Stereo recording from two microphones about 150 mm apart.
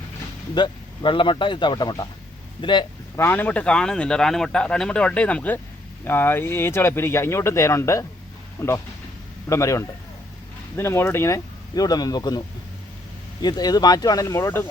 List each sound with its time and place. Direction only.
0.5 s speech: 30° left (ahead or behind)
3.2 s speech: 15° left (ahead or behind)
13.4 s speech: 25° left (ahead or behind)